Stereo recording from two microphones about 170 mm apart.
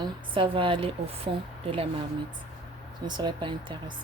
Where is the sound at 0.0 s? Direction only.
30° right (ahead or behind).